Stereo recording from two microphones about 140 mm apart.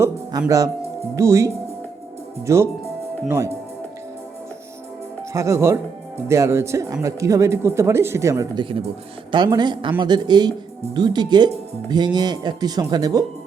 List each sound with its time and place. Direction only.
0.0 s speech: 20° right (ahead or behind)
2.5 s speech: 20° right (ahead or behind)
5.3 s speech: 20° right (ahead or behind)
9.3 s speech: 30° right (ahead or behind)